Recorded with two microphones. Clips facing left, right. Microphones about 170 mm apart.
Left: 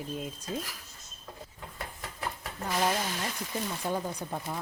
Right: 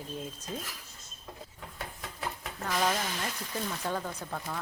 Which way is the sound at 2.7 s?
10° left (ahead or behind).